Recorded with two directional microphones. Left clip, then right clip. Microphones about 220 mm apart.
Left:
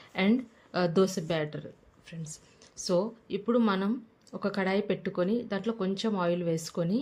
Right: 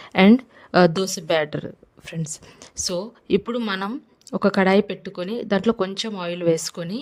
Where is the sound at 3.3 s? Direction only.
55° right (ahead or behind).